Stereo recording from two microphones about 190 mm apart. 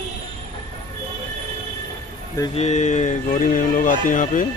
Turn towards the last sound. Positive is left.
turn(degrees=45)  # may be behind; listen again after turning